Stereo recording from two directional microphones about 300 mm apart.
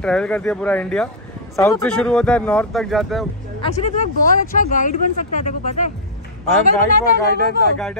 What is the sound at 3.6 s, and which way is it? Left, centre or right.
Speech, left.